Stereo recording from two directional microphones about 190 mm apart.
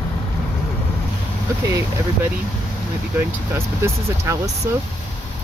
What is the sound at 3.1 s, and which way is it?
Speech, 15° right (ahead or behind).